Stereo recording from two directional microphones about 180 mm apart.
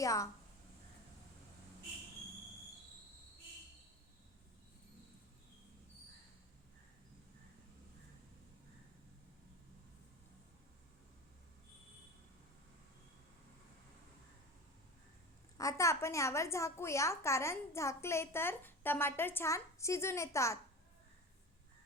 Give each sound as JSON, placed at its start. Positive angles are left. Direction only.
{"t": 0.0, "sound": "a woman's voice", "side_deg": 20}
{"t": 15.5, "sound": "a woman's voice", "side_deg": 15}